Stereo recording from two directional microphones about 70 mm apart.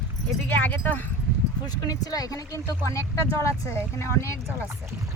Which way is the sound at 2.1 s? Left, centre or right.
Left.